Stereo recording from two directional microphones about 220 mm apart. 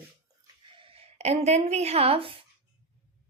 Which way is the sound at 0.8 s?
30° right (ahead or behind).